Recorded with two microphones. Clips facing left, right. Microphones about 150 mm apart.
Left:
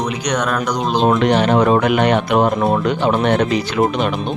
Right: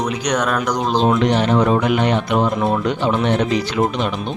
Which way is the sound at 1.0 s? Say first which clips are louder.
Left 3 dB; 60° left (ahead or behind).